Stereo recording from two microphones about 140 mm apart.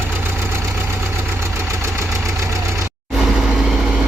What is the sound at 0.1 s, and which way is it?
Engine, 15° right (ahead or behind).